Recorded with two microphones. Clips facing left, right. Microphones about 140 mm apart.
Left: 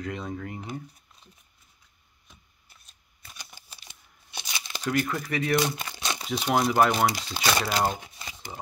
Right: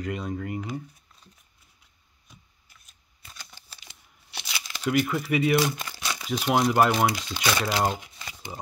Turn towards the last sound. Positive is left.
turn(degrees=-10)  # may be behind; listen again after turning